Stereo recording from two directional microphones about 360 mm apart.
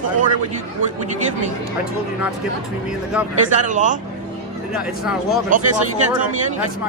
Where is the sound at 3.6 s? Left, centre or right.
Right.